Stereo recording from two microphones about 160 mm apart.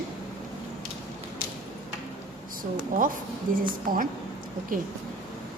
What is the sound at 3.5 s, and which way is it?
Speech, 60° right (ahead or behind).